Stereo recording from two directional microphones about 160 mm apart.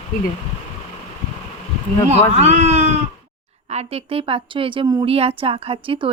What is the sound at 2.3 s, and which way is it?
A woman's voice, 45° right (ahead or behind).